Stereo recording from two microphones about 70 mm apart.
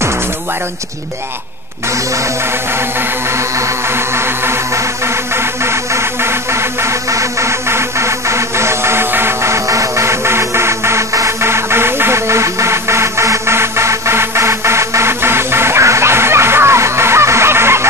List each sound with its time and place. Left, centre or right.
3.3 s music: right